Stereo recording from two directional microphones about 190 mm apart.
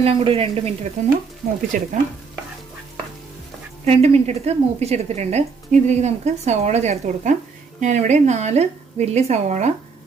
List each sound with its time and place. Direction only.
0.0 s speech: 30° right (ahead or behind)
1.7 s stir: 45° right (ahead or behind)
3.8 s speech: 35° right (ahead or behind)